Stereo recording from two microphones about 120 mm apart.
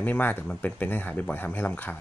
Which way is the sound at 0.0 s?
15° left (ahead or behind).